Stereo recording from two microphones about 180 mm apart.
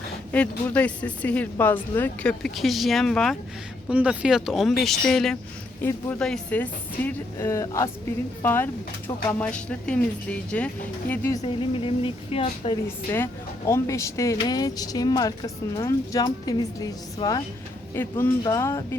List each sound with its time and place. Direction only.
0.3 s speech: 5° left (ahead or behind)
3.8 s speech: 5° right (ahead or behind); by 11.3 s 15° left (ahead or behind)
11.4 s speech: 30° left (ahead or behind)
13.1 s speech: 15° left (ahead or behind)